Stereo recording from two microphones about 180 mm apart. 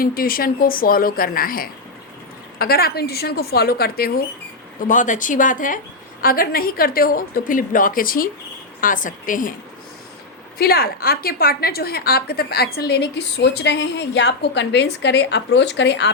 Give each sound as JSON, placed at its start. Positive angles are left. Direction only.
{"t": 0.0, "sound": "a woman's voice", "side_deg": 55}
{"t": 4.8, "sound": "a woman's voice", "side_deg": 45}
{"t": 10.6, "sound": "a woman's voice", "side_deg": 60}